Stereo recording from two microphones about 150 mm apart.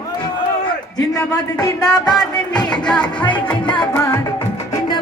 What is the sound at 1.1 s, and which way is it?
Speech, 25° left (ahead or behind).